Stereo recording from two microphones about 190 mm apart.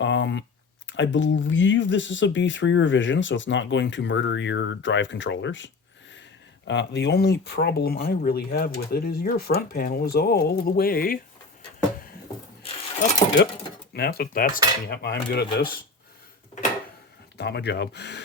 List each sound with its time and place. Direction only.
0.0 s a sound: 70° left (ahead or behind)
0.9 s speech: 75° left (ahead or behind); by 11.2 s 50° left (ahead or behind)
12.6 s sewing machine: 35° left (ahead or behind)
13.9 s speech: 55° left (ahead or behind)
17.3 s speech: 60° left (ahead or behind)